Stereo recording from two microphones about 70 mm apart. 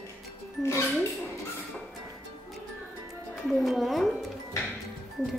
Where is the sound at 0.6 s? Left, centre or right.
Left.